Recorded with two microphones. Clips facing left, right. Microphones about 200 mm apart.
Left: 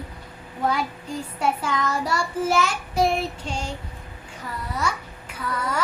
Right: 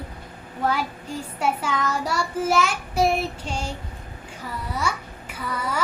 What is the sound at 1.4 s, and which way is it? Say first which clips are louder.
Child singing: even; 5° right (ahead or behind).